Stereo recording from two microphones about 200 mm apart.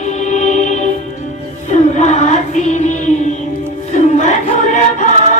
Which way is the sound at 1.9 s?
35° left (ahead or behind).